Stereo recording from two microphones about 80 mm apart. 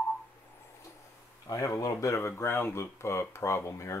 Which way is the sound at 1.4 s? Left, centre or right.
Left.